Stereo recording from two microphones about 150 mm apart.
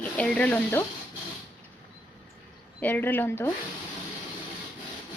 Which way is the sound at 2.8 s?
15° left (ahead or behind).